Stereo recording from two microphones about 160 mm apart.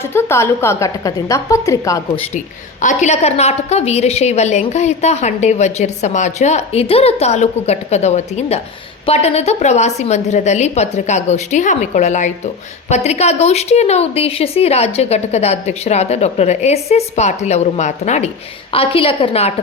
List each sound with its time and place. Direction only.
0.1 s a woman's voice: 15° left (ahead or behind)
2.8 s a woman's voice: 45° left (ahead or behind)
18.7 s a woman's voice: 35° left (ahead or behind)